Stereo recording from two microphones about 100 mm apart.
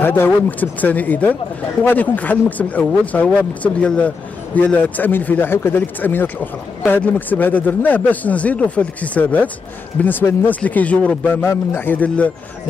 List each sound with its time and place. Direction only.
0.0 s speech: 20° left (ahead or behind)